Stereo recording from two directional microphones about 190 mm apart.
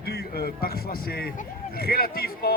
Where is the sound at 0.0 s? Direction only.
55° left (ahead or behind).